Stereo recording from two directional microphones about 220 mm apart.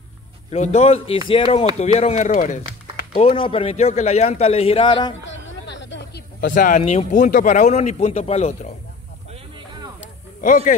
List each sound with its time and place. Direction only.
0.5 s speech: 30° left (ahead or behind)
5.3 s speech: 55° left (ahead or behind); by 8.7 s 30° left (ahead or behind)
10.4 s speech: 35° left (ahead or behind)